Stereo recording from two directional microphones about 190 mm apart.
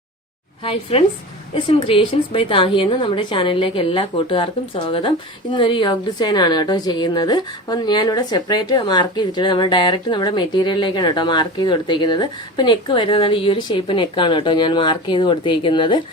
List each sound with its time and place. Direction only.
0.6 s a woman's voice: 30° left (ahead or behind)